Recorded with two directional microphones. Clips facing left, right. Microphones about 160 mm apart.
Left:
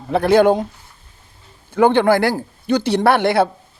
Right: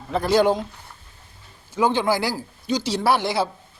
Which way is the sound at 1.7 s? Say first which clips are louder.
Left 7 dB; 60° left (ahead or behind).